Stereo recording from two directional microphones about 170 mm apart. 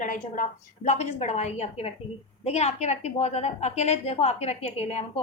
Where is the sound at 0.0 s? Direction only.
50° left (ahead or behind).